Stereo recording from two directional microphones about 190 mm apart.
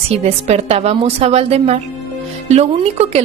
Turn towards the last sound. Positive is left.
turn(degrees=-35)  # may be behind; listen again after turning